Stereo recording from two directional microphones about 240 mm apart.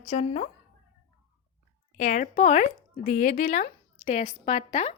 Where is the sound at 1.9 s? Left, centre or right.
Left.